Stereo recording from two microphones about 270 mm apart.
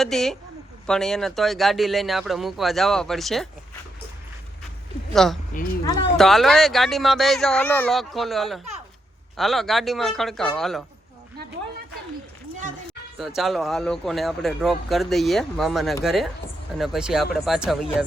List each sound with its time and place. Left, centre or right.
0.0 s speech: centre
5.1 s speech: centre
5.8 s speech: centre
6.1 s speech: centre
13.1 s speech: centre